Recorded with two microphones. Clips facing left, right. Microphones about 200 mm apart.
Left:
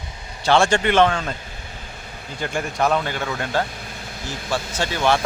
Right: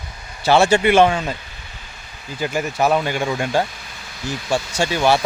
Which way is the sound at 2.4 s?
5° right (ahead or behind).